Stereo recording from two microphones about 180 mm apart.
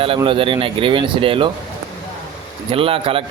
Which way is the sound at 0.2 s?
30° right (ahead or behind).